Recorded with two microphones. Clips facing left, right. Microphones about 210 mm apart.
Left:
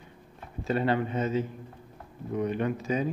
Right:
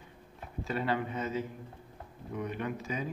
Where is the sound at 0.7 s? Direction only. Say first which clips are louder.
Left 6 dB; 25° left (ahead or behind).